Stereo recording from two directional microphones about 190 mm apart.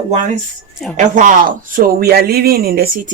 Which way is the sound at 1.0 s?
40° right (ahead or behind).